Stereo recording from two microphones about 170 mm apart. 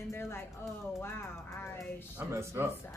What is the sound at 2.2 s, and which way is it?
Speech, 15° right (ahead or behind).